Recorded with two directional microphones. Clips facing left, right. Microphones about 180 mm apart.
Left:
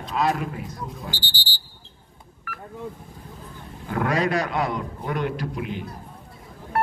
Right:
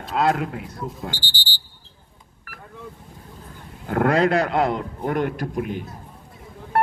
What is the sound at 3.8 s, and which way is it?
A man's voice, 55° right (ahead or behind).